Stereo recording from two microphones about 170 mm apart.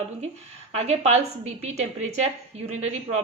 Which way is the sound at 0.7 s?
40° right (ahead or behind).